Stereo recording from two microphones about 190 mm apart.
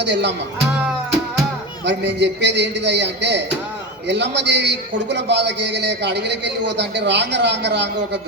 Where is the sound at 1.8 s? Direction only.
65° right (ahead or behind).